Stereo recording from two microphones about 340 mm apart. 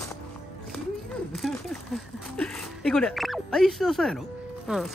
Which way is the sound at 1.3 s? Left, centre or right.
Centre.